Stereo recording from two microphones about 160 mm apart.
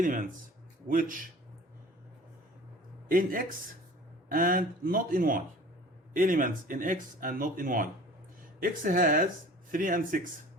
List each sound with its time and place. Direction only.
0.0 s speech: 55° right (ahead or behind)
3.1 s speech: 60° right (ahead or behind)